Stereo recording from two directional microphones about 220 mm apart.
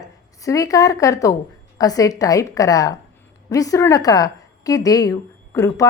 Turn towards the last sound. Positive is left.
turn(degrees=15)  # may be behind; listen again after turning